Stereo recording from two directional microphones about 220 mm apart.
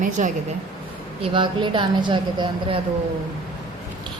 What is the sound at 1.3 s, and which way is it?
Speech, 20° right (ahead or behind).